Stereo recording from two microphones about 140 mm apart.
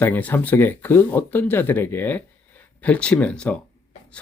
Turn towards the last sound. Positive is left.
turn(degrees=10)  # may be behind; listen again after turning